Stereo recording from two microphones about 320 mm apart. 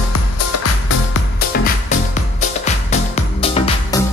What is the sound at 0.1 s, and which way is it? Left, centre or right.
Music, left.